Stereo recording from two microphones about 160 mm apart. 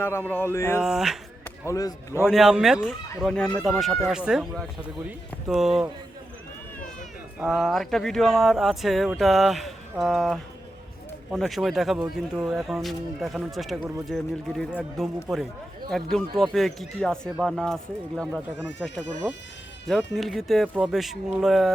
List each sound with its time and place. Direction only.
0.0 s a sound: 15° left (ahead or behind)
0.8 s speech: 5° right (ahead or behind)
1.6 s speech: 20° left (ahead or behind)
2.2 s speech: 5° right (ahead or behind)
7.3 s speech: centre (ahead or behind)
19.2 s speech: centre (ahead or behind)